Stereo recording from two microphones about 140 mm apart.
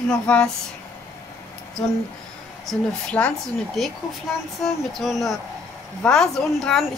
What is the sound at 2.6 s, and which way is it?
Speech, 10° left (ahead or behind).